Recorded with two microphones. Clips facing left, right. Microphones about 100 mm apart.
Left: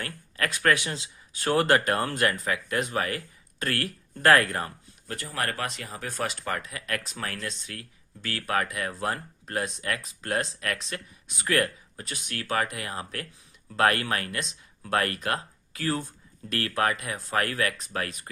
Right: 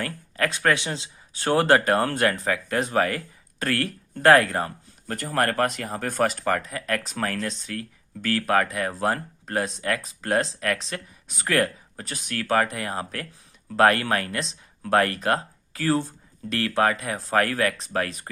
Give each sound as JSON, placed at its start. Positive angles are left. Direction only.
{"t": 0.0, "sound": "speech", "side_deg": -30}
{"t": 5.0, "sound": "speech", "side_deg": -45}